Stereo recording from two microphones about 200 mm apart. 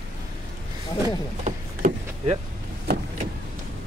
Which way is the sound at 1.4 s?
35° right (ahead or behind).